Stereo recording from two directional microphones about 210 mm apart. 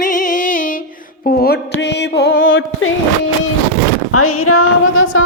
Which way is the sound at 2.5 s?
65° left (ahead or behind).